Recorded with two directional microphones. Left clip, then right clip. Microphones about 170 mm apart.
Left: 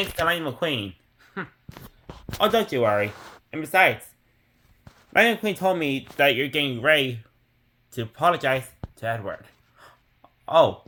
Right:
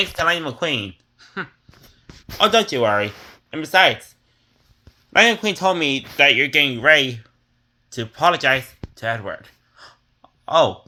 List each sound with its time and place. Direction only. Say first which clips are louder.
0.2 s speech: right 1 dB; 15° right (ahead or behind)
2.2 s speech: right 5 dB; 5° right (ahead or behind)
5.1 s speech: right 5 dB; 15° left (ahead or behind); by 9.0 s 5° right (ahead or behind)
9.0 s a sound: right 4 dB; 20° right (ahead or behind)